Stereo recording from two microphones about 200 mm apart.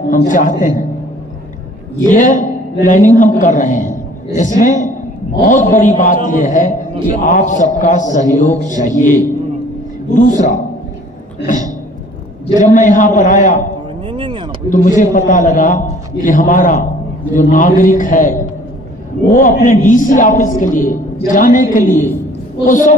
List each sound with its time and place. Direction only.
0.3 s a man's voice: 40° left (ahead or behind)
2.0 s a man's voice: 40° left (ahead or behind)
12.5 s a man's voice: 40° left (ahead or behind)
14.0 s a sound: 25° right (ahead or behind)
14.7 s a man's voice: 40° left (ahead or behind)